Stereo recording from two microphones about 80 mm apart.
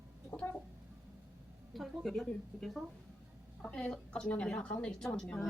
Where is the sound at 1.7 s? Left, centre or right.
Centre.